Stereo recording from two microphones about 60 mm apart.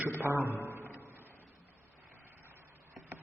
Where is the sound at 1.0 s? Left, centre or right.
Right.